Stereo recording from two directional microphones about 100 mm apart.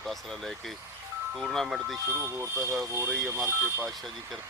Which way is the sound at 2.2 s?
25° right (ahead or behind).